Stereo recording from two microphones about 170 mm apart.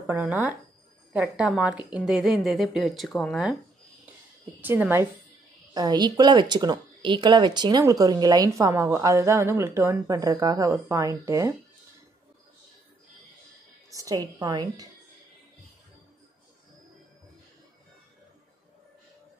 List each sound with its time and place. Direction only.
0.2 s a woman's voice: 10° right (ahead or behind)
4.6 s a woman's voice: 10° right (ahead or behind)
5.7 s speech: 25° right (ahead or behind)
13.8 s speech: 20° right (ahead or behind)